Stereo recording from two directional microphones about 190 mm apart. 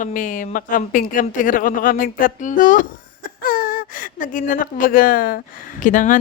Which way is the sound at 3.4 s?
50° left (ahead or behind).